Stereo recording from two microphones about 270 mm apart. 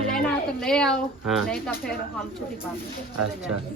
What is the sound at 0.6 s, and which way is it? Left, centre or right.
A woman's voice, centre.